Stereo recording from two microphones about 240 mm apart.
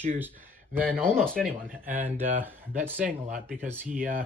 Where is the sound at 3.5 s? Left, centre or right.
Centre.